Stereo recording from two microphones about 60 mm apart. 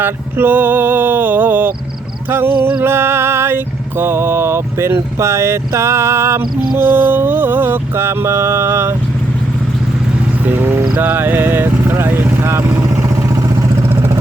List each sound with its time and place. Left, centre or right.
0.0 s a sound: right
2.8 s vehicle: right
6.8 s vehicle: right
10.4 s a sound: right
11.0 s speech: right
12.5 s vehicle: right
12.8 s vehicle: right